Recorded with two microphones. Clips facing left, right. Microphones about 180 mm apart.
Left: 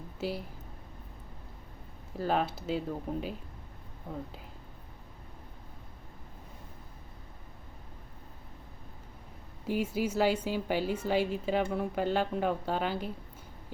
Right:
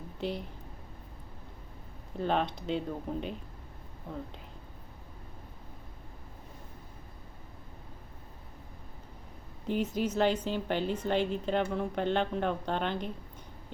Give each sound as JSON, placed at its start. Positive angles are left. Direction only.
{"t": 0.2, "sound": "a woman's voice", "side_deg": 5}
{"t": 2.1, "sound": "speech", "side_deg": 5}
{"t": 9.6, "sound": "speech", "side_deg": 10}